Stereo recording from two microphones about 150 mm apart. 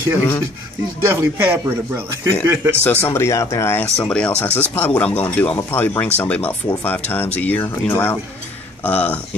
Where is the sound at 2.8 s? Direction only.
15° left (ahead or behind).